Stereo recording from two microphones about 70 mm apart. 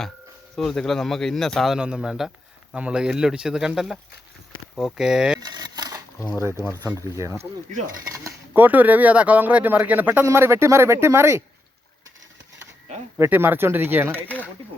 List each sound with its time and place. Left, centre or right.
0.5 s speech: centre
1.7 s speech: centre
4.9 s speech: centre
5.4 s a sound: right
6.8 s speech: right
8.5 s speech: right
10.2 s speech: right
13.1 s speech: right
14.3 s speech: left